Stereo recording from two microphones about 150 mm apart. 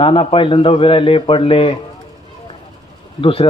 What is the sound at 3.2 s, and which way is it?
Speech, 40° left (ahead or behind).